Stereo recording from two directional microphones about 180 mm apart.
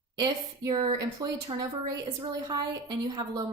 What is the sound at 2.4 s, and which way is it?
A woman's voice, 20° right (ahead or behind).